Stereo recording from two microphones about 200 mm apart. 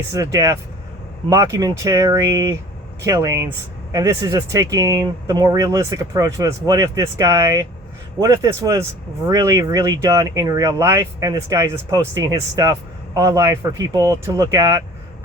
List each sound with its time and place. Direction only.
0.1 s speech: 15° right (ahead or behind)